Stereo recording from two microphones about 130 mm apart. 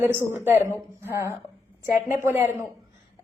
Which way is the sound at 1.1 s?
20° right (ahead or behind).